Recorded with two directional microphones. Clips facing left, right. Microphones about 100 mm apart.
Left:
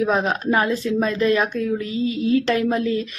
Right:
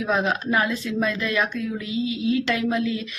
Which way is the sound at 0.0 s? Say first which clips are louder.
Left 3 dB; 35° left (ahead or behind).